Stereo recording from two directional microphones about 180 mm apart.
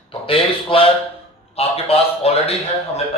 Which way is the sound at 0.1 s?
30° left (ahead or behind).